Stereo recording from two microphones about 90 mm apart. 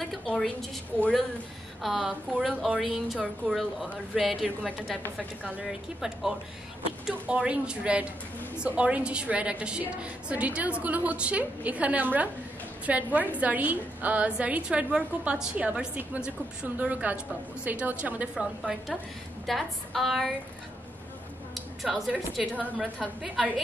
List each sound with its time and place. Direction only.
0.0 s a sound: centre (ahead or behind)
1.8 s a woman's voice: 5° right (ahead or behind)
5.7 s a woman's voice: 5° right (ahead or behind)
18.3 s a woman's voice: 5° right (ahead or behind)
21.8 s a woman's voice: centre (ahead or behind)
22.1 s a woman's voice: 15° right (ahead or behind)
22.8 s a woman's voice: centre (ahead or behind)